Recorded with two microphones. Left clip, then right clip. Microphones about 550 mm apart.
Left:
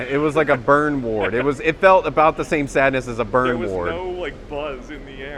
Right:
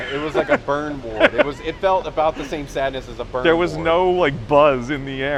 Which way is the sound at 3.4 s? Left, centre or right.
Right.